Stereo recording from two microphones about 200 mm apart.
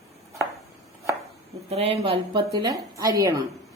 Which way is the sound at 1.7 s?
30° right (ahead or behind).